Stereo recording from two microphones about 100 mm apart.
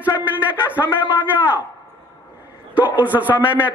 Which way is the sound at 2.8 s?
15° right (ahead or behind).